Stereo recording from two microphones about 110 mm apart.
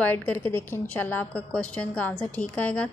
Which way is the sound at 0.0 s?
15° left (ahead or behind).